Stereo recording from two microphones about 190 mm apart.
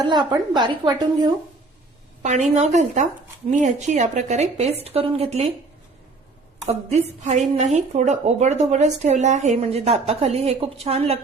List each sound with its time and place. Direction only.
0.1 s a woman's voice: 25° right (ahead or behind)
2.6 s a woman's voice: 35° right (ahead or behind)
6.7 s a woman's voice: 35° right (ahead or behind)